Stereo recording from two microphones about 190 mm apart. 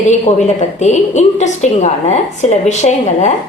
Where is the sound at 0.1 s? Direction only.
35° left (ahead or behind).